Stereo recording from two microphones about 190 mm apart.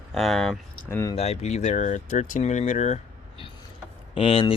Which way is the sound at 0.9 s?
15° left (ahead or behind).